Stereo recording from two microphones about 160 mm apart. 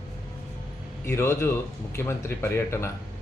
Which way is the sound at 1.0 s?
15° left (ahead or behind).